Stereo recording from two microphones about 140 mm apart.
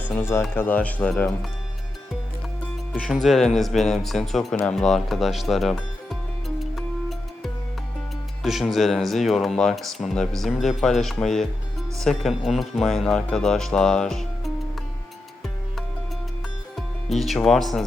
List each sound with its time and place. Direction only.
0.0 s speech: 15° left (ahead or behind)
2.9 s speech: 5° left (ahead or behind)
6.6 s music: centre (ahead or behind)
8.4 s speech: centre (ahead or behind)
16.7 s speech: centre (ahead or behind)